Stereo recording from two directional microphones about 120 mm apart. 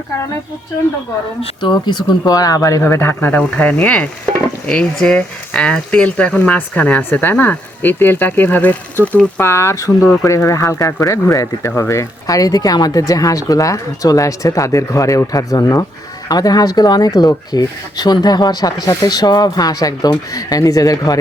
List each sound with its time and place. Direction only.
1.4 s speech: 40° left (ahead or behind)